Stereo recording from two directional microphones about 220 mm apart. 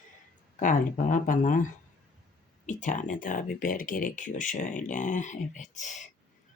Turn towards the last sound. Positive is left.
turn(degrees=35)  # may be behind; listen again after turning